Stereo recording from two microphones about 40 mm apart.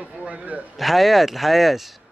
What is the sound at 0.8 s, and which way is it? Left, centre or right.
Speech, centre.